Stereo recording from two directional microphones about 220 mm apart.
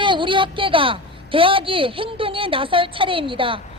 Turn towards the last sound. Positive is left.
turn(degrees=-25)  # may be behind; listen again after turning